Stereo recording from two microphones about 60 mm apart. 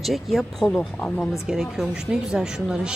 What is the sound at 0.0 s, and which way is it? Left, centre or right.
Speech, centre.